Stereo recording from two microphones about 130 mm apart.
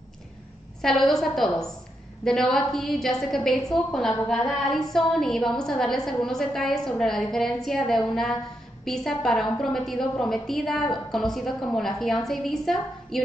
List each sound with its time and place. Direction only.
0.8 s a woman's voice: centre (ahead or behind)